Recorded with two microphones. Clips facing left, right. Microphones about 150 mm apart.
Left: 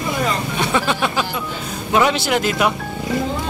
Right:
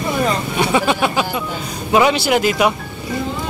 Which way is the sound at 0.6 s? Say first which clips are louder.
Right 4 dB; 5° right (ahead or behind).